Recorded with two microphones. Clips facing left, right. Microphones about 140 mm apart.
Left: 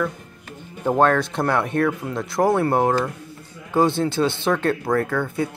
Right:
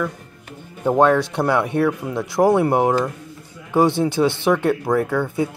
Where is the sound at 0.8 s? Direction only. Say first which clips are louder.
Right 2 dB; 15° right (ahead or behind).